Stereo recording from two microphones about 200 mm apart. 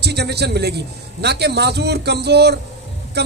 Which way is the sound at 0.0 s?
55° right (ahead or behind).